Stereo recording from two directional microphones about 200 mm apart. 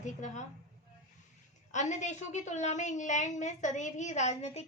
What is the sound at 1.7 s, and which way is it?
A woman's voice, 35° left (ahead or behind).